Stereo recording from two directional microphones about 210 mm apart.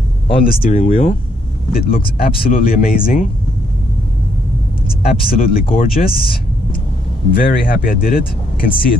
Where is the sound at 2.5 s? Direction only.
45° left (ahead or behind).